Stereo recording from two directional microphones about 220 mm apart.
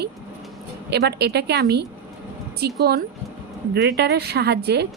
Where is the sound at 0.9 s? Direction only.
50° right (ahead or behind).